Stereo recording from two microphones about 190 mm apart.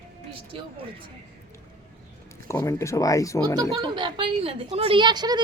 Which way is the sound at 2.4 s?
15° left (ahead or behind).